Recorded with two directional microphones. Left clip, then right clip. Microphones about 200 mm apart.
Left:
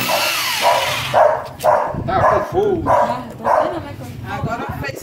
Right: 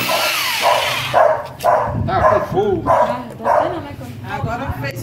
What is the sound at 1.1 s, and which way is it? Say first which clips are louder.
Dog: even; 15° right (ahead or behind).